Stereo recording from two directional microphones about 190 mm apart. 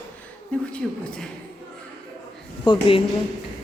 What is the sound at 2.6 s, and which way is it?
Speech, 25° left (ahead or behind).